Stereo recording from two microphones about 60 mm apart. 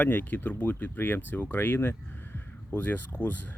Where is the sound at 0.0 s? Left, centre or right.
Left.